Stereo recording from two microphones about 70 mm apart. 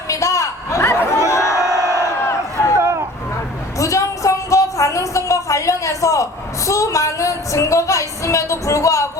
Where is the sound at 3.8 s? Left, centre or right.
Left.